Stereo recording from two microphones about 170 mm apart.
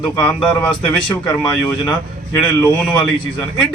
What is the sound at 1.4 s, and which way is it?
Speech, 20° left (ahead or behind).